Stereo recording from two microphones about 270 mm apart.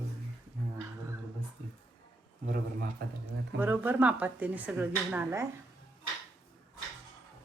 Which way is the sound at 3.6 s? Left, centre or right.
Centre.